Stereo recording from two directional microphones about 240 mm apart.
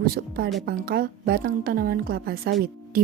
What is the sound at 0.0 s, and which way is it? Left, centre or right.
A woman's voice, right.